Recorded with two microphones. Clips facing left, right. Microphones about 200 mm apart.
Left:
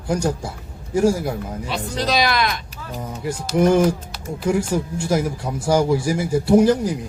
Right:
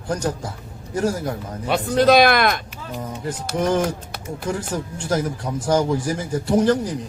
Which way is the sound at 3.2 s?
10° left (ahead or behind).